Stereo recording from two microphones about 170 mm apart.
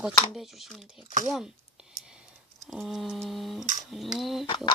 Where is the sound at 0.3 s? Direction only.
Centre (ahead or behind).